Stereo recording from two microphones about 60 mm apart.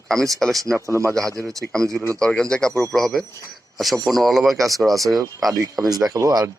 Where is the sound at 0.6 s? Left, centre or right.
Right.